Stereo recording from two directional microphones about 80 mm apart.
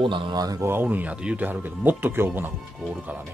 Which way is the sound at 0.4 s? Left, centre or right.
Right.